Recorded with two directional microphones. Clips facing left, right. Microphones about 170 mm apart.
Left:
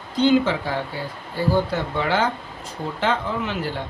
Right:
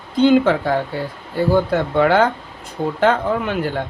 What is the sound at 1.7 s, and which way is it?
Speech, 55° right (ahead or behind).